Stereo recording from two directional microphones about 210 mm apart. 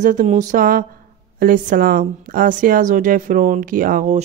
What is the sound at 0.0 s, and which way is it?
Speech, 35° right (ahead or behind).